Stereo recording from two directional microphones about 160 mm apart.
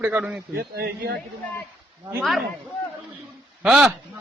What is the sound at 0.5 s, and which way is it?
Speech, 80° right.